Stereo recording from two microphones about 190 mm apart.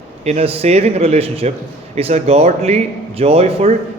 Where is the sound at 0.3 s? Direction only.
30° right (ahead or behind).